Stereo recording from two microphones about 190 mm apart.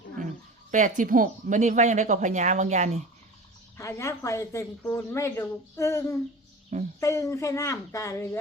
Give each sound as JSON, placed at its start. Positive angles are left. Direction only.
{"t": 0.7, "sound": "speech", "side_deg": -45}
{"t": 3.8, "sound": "speech", "side_deg": 15}